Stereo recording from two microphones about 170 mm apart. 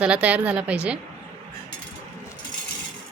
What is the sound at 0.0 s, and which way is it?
Speech, 10° right (ahead or behind).